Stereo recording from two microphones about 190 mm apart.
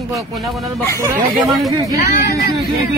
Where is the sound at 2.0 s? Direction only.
55° left (ahead or behind).